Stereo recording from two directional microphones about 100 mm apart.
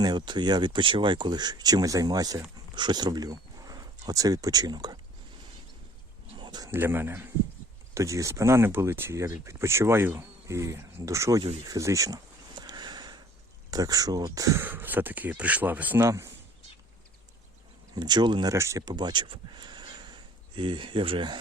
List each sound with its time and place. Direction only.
0.0 s speech: 45° right (ahead or behind)
6.3 s a sound: 50° right (ahead or behind)
6.7 s speech: 20° right (ahead or behind)
12.5 s sniff: 45° right (ahead or behind)
13.7 s speech: 40° right (ahead or behind)
14.6 s speech: 20° right (ahead or behind)
16.0 s speech: 30° right (ahead or behind)
17.9 s speech: 45° right (ahead or behind)
18.5 s speech: 30° right (ahead or behind)
18.9 s a sound: 45° right (ahead or behind)
20.6 s speech: 55° right (ahead or behind)